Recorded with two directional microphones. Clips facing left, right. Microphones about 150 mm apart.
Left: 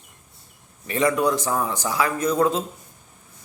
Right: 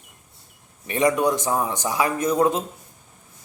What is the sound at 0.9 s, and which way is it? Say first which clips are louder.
A man's voice: right 1 dB; 20° right (ahead or behind).